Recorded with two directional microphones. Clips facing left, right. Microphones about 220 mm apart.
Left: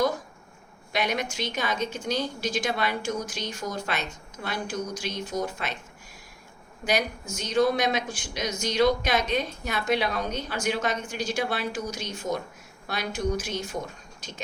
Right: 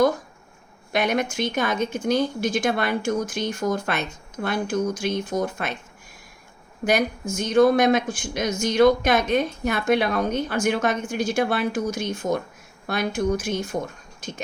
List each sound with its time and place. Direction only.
0.9 s speech: 50° right (ahead or behind)
6.8 s speech: 50° right (ahead or behind)
14.2 s a sound: 50° right (ahead or behind)